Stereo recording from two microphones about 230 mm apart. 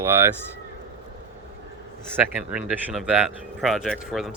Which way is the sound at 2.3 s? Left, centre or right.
Centre.